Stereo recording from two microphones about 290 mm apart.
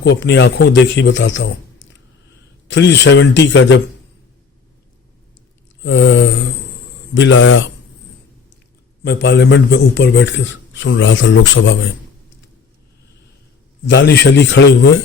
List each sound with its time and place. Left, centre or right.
0.0 s a man's voice: left
5.8 s a man's voice: left
9.0 s a man's voice: left
13.8 s a man's voice: left